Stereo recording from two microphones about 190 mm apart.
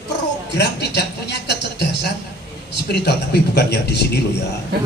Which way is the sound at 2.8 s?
60° left (ahead or behind).